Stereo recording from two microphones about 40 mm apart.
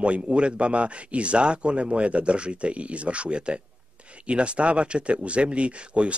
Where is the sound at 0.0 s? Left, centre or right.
Right.